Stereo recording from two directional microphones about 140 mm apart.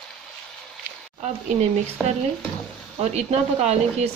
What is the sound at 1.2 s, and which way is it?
Speech, 55° right (ahead or behind).